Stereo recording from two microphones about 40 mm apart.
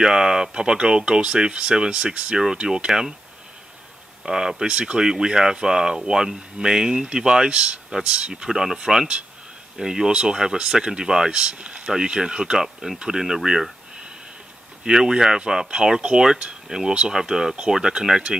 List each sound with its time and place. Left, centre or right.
0.0 s speech: centre
2.9 s speech: centre
4.2 s speech: centre
8.5 s speech: centre
8.7 s speech: centre
12.6 s speech: centre
14.9 s speech: centre